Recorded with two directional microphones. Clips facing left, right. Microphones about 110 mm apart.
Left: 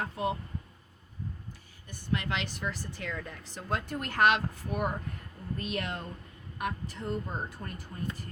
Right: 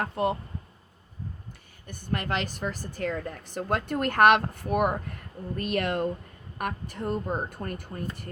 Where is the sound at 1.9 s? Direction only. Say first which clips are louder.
Right 3 dB; 50° right (ahead or behind).